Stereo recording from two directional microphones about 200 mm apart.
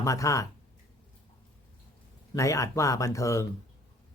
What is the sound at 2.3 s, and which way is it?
Speech, 15° left (ahead or behind).